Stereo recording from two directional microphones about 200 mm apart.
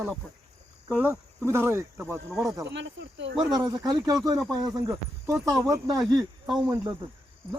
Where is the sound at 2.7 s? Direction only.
60° right (ahead or behind).